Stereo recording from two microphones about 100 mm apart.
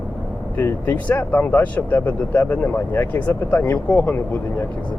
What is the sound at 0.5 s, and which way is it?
Speech, 20° left (ahead or behind).